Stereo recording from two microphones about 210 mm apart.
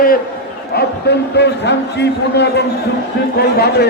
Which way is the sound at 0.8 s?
50° left (ahead or behind).